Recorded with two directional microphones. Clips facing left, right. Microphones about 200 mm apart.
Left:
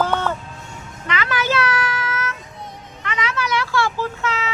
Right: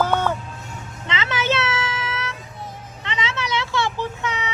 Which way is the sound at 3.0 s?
25° right (ahead or behind).